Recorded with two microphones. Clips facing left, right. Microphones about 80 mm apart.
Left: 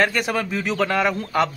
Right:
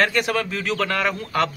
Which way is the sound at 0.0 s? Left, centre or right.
Centre.